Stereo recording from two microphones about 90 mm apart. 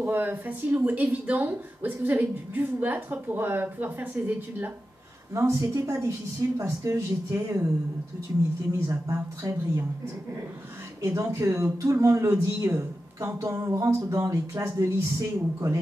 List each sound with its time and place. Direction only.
0.0 s speech: 20° right (ahead or behind)
5.3 s speech: 35° right (ahead or behind)
8.7 s speech: 35° right (ahead or behind)
11.0 s speech: 40° right (ahead or behind)